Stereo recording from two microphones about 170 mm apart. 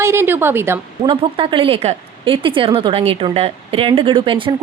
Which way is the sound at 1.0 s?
30° right (ahead or behind).